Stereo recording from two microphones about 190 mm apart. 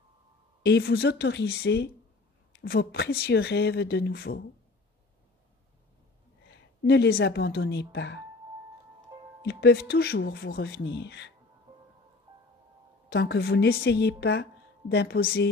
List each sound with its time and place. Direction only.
0.6 s a woman's voice: 60° left (ahead or behind)
6.8 s a woman's voice: 55° left (ahead or behind)
9.4 s a woman's voice: 60° left (ahead or behind)
13.1 s a woman's voice: 60° left (ahead or behind)